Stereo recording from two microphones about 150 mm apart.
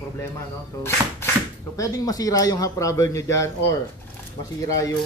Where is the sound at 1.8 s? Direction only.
25° left (ahead or behind).